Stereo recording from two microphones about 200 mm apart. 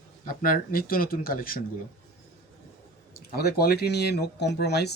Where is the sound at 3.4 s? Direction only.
50° left (ahead or behind).